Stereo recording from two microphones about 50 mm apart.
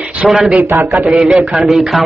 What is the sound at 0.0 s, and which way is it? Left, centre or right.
A man's voice, right.